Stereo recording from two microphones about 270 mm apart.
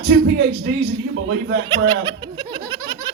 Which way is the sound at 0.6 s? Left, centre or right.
Right.